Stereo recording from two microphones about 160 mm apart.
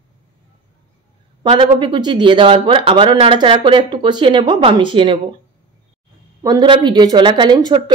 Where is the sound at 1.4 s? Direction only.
30° right (ahead or behind).